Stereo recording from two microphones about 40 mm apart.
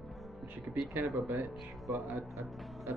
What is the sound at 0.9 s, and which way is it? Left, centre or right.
Speech, right.